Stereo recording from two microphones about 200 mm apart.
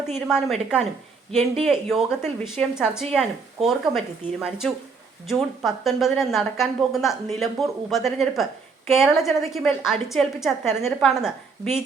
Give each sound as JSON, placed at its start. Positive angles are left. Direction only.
{"t": 0.3, "sound": "a woman's voice", "side_deg": 0}
{"t": 1.3, "sound": "speech", "side_deg": -35}
{"t": 1.6, "sound": "a woman's voice", "side_deg": 0}